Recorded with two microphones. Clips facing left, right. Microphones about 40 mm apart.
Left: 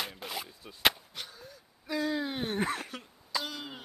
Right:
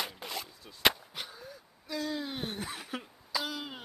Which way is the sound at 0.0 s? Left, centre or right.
Centre.